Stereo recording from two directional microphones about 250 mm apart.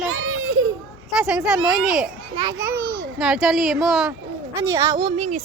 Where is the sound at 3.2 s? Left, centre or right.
Centre.